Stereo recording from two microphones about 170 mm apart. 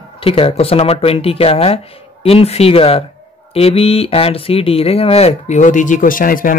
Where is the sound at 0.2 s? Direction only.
35° left (ahead or behind).